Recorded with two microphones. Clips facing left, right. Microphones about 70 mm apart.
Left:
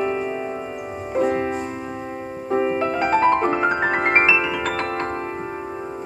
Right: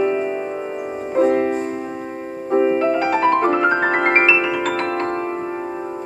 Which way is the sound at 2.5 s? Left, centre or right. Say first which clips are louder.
Right 4 dB; centre.